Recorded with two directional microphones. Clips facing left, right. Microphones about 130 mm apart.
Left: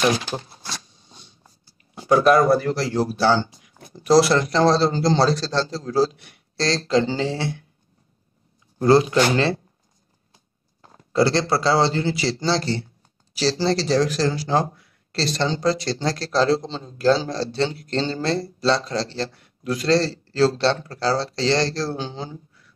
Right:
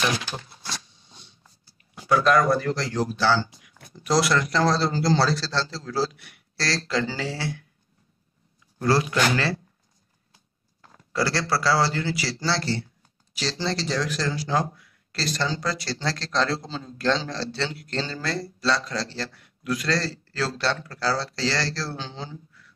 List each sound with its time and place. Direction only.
0.3 s a sound: 35° left (ahead or behind)
2.0 s speech: 30° left (ahead or behind)
3.2 s speech: 20° left (ahead or behind)
8.7 s speech: 25° left (ahead or behind)
10.8 s speech: 25° left (ahead or behind)
13.3 s speech: 35° left (ahead or behind); by 16.2 s 20° left (ahead or behind)
16.7 s speech: 30° left (ahead or behind)
17.3 s speech: 15° left (ahead or behind)